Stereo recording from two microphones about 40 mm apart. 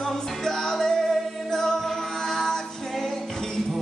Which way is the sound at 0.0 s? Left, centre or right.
Centre.